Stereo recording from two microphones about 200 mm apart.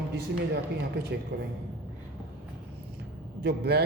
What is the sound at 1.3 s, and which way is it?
Speech, 50° right (ahead or behind).